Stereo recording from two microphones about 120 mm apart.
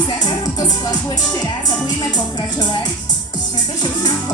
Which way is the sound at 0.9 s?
35° left (ahead or behind).